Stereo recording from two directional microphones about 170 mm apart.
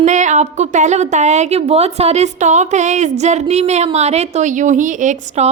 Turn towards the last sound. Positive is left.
turn(degrees=-45)  # may be behind; listen again after turning